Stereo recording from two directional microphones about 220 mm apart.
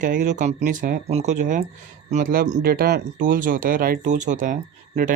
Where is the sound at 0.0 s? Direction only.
35° right (ahead or behind).